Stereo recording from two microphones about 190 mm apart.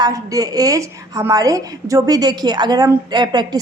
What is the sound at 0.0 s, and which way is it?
A woman's voice, 20° right (ahead or behind).